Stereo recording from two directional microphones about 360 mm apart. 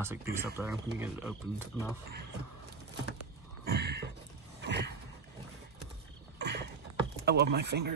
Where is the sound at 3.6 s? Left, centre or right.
Right.